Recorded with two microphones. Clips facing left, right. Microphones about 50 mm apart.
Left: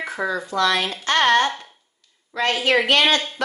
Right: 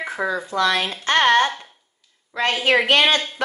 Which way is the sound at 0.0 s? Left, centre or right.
Centre.